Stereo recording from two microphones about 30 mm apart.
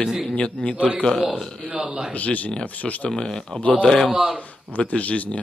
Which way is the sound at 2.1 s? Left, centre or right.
Left.